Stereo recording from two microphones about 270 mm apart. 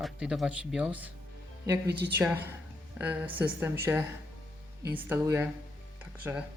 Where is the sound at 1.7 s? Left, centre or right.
Right.